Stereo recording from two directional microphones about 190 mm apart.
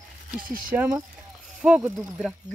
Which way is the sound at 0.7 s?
10° right (ahead or behind).